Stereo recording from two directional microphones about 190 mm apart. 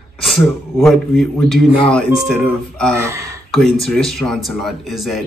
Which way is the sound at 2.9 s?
15° right (ahead or behind).